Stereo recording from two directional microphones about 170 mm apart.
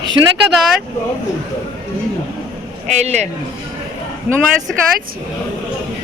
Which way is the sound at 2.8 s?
45° right (ahead or behind).